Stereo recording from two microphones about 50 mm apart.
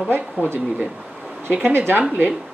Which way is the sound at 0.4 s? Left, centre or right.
Right.